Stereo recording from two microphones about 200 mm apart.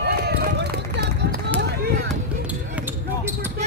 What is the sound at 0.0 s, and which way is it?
Run, 50° right (ahead or behind).